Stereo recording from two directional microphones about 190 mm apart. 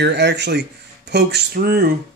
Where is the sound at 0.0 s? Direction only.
65° right (ahead or behind).